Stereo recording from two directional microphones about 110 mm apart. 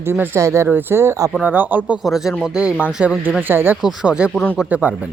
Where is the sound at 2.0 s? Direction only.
Centre (ahead or behind); by 3.8 s 20° right (ahead or behind).